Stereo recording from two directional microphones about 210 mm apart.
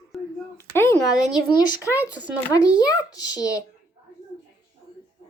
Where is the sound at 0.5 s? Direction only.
10° left (ahead or behind).